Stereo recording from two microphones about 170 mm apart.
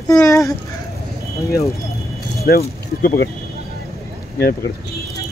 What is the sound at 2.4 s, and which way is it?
Speech, 65° left (ahead or behind).